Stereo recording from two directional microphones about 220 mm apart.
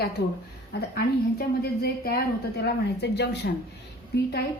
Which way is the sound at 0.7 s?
45° left (ahead or behind).